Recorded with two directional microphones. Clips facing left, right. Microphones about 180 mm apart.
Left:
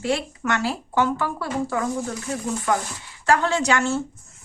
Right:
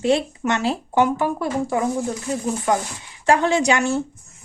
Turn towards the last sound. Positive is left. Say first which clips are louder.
# right 3 dB
turn(degrees=-15)  # may be behind; listen again after turning